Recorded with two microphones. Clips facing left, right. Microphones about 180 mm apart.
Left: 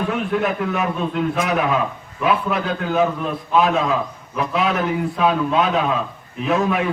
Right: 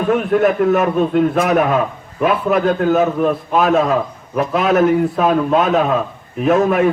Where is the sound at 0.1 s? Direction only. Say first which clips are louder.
Right 7 dB; 50° right (ahead or behind).